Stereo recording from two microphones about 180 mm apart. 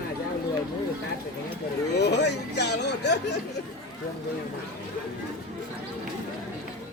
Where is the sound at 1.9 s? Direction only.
70° left (ahead or behind).